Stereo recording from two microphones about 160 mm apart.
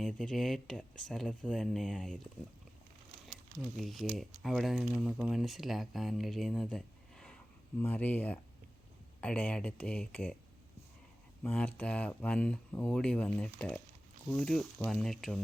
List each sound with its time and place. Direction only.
0.0 s speech: 5° left (ahead or behind)
3.8 s speech: centre (ahead or behind)
11.4 s speech: 10° left (ahead or behind)